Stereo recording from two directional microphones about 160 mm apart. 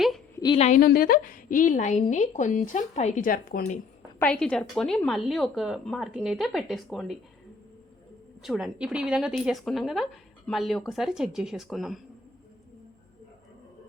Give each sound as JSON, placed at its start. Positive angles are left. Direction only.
{"t": 0.5, "sound": "a woman's voice", "side_deg": 40}
{"t": 0.8, "sound": "a woman's voice", "side_deg": 65}
{"t": 4.2, "sound": "a woman's voice", "side_deg": 10}
{"t": 8.4, "sound": "a woman's voice", "side_deg": 0}